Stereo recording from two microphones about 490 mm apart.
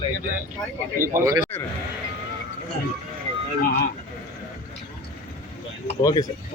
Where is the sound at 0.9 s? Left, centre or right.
Centre.